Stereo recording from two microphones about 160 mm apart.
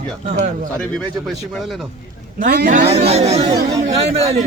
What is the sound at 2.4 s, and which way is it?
Speech, 75° right (ahead or behind).